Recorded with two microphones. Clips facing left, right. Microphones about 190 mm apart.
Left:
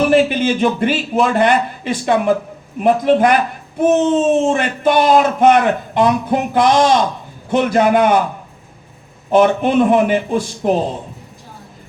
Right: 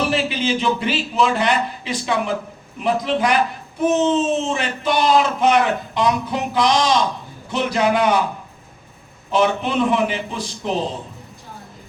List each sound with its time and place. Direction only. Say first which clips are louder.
0.0 s speech: left 8 dB; 50° left (ahead or behind)
9.3 s speech: left 6 dB; 50° left (ahead or behind)